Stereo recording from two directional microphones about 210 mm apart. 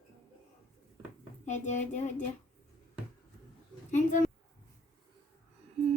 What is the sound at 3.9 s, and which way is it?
Speech, 35° left (ahead or behind).